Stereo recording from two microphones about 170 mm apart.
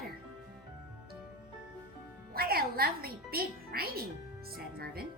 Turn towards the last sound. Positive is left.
turn(degrees=-65)  # may be behind; listen again after turning